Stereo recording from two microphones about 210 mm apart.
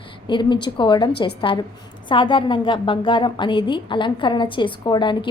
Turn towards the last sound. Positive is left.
turn(degrees=20)  # may be behind; listen again after turning